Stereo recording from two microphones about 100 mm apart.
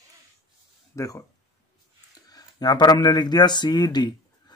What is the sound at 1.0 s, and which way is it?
Speech, 35° left (ahead or behind).